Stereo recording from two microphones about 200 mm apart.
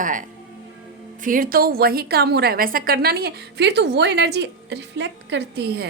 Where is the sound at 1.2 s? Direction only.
45° right (ahead or behind).